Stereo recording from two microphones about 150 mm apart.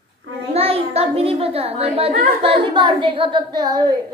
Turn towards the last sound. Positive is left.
turn(degrees=-25)  # may be behind; listen again after turning